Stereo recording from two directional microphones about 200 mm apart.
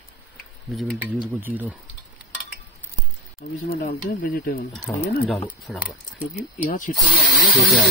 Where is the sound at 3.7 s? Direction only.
45° left (ahead or behind).